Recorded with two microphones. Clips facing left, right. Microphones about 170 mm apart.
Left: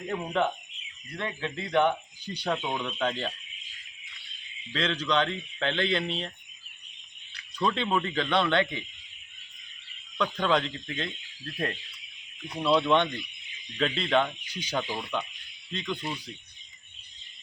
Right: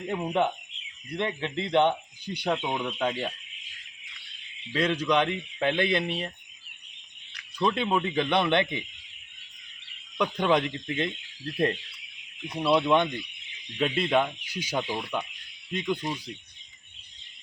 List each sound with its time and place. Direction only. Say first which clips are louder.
0.1 s speech: right 2 dB; 15° right (ahead or behind)
2.6 s speech: right 1 dB; 10° right (ahead or behind)
4.7 s speech: right 3 dB; 10° right (ahead or behind)
7.6 s speech: right 2 dB; 10° right (ahead or behind)
10.2 s speech: right 2 dB; 15° right (ahead or behind)
12.5 s speech: right 1 dB; 10° right (ahead or behind)